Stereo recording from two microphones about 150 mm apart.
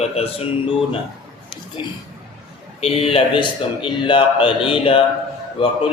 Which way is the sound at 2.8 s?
40° left (ahead or behind).